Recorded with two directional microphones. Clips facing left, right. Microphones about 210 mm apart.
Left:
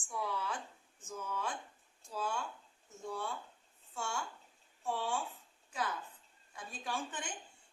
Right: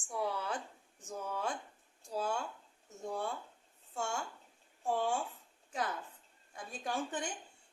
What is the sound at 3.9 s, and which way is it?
Speech, 45° right (ahead or behind).